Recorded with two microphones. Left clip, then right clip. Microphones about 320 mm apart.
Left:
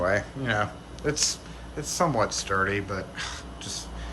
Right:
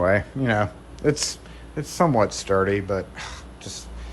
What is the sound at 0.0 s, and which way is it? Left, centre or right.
Speech, centre.